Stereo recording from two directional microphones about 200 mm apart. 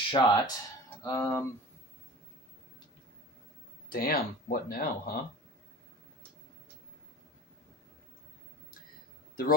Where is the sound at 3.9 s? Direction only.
50° left (ahead or behind).